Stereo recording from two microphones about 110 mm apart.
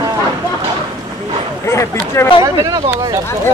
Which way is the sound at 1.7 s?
25° left (ahead or behind).